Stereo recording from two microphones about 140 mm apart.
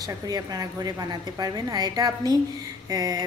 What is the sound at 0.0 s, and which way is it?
A woman's voice, 25° right (ahead or behind).